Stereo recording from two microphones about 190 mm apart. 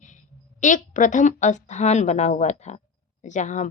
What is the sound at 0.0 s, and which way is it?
A woman's voice, 40° left (ahead or behind).